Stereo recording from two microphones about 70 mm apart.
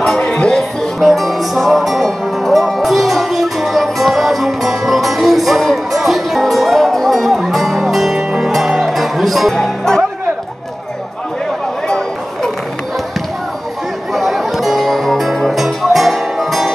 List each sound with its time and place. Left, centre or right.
0.2 s music: centre
14.1 s music: centre